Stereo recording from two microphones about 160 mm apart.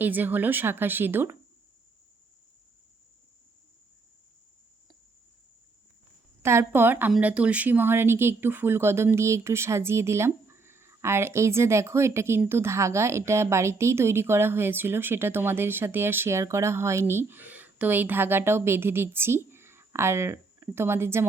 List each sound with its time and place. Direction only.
0.0 s speech: 10° right (ahead or behind)
6.4 s speech: 15° right (ahead or behind)